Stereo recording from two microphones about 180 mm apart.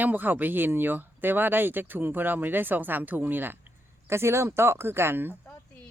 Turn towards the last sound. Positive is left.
turn(degrees=-10)  # may be behind; listen again after turning